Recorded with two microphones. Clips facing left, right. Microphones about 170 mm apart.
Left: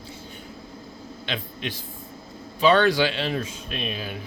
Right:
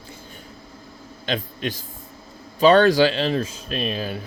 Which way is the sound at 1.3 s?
45° right (ahead or behind).